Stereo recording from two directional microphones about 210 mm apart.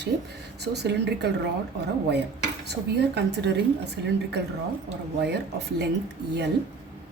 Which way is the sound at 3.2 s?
55° right (ahead or behind).